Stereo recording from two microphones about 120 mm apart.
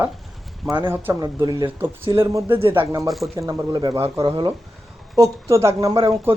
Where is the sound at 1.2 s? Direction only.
30° right (ahead or behind).